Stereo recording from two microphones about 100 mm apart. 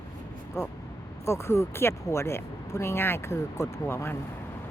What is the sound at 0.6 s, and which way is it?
Speech, 25° left (ahead or behind).